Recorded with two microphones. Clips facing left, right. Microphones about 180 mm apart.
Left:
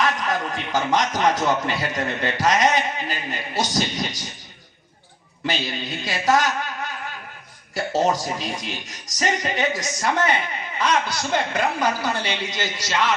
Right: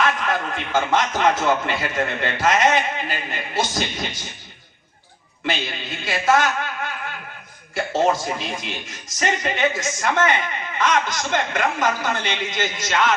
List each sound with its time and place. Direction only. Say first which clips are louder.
0.0 s speech: right 1 dB; 40° left (ahead or behind)
5.5 s speech: even; 40° left (ahead or behind)
7.8 s speech: right 1 dB; 40° left (ahead or behind)